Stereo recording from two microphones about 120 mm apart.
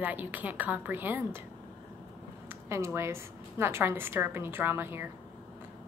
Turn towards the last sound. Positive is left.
turn(degrees=-20)  # may be behind; listen again after turning